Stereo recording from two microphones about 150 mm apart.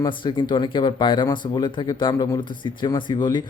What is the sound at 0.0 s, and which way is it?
Speech, 30° left (ahead or behind).